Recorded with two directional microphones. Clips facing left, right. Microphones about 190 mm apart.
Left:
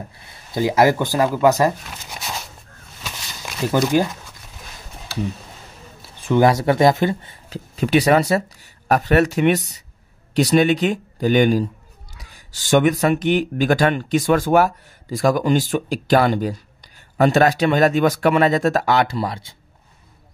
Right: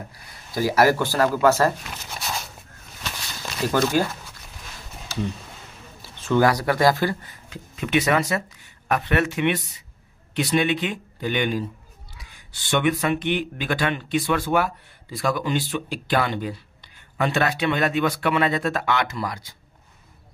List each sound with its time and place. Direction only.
0.6 s speech: 20° left (ahead or behind)
3.7 s speech: 15° left (ahead or behind)
6.2 s speech: 20° left (ahead or behind)